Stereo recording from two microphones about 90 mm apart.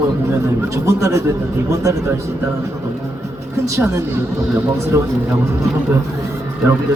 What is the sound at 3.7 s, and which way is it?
Speech, 35° right (ahead or behind).